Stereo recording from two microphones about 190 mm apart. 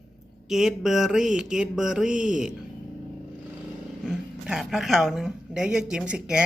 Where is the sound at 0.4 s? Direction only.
Centre (ahead or behind).